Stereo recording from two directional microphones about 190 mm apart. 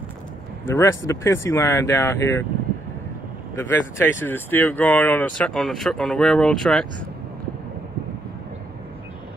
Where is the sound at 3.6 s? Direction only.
15° left (ahead or behind).